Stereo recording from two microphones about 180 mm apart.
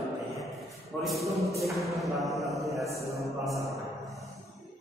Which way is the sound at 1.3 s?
15° right (ahead or behind).